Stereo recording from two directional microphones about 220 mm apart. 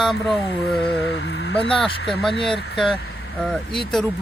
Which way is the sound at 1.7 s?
Centre (ahead or behind).